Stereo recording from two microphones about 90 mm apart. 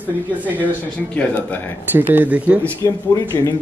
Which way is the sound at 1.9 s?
20° right (ahead or behind).